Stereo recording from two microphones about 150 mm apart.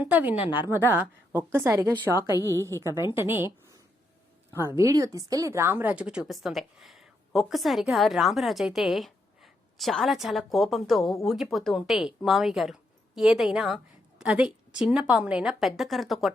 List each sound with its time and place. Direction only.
0.0 s a woman's voice: 10° right (ahead or behind)
0.4 s a woman's voice: 35° left (ahead or behind)
0.7 s a woman's voice: 15° right (ahead or behind)
2.3 s a woman's voice: 20° left (ahead or behind)
3.2 s a woman's voice: 15° right (ahead or behind)
4.5 s speech: 15° right (ahead or behind); by 16.3 s centre (ahead or behind)